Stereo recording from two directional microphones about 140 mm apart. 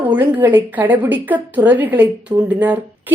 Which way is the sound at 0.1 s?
10° right (ahead or behind).